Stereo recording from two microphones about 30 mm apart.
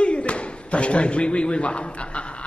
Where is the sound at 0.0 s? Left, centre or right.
Left.